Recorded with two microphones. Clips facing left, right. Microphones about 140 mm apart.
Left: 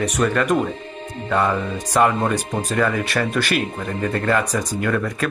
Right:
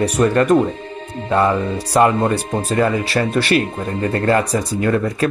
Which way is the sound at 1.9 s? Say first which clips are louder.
Right 3 dB; 15° right (ahead or behind).